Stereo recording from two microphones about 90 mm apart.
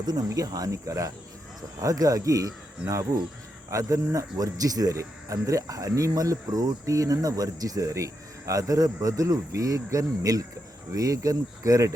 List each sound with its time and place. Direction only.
0.0 s speech: 50° right (ahead or behind)